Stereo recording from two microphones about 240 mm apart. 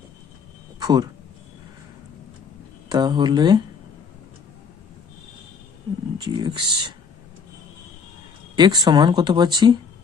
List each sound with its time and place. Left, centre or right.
0.8 s speech: centre
2.9 s speech: centre
6.1 s speech: centre
8.5 s speech: centre